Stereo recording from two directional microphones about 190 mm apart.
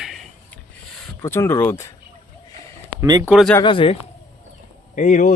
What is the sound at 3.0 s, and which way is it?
Speech, 20° right (ahead or behind).